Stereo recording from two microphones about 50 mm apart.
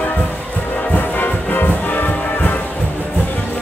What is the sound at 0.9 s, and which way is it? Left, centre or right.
Music, left.